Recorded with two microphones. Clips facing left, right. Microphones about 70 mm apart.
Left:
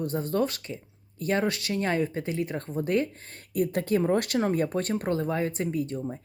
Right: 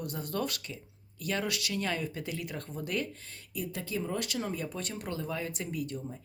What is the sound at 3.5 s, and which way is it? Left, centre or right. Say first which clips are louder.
Speech: left 11 dB; left.